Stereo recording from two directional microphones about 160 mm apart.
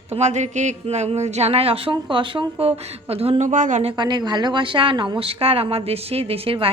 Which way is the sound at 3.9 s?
25° right (ahead or behind).